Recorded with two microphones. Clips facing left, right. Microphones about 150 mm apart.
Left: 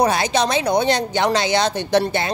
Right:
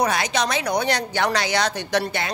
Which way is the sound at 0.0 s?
30° left (ahead or behind).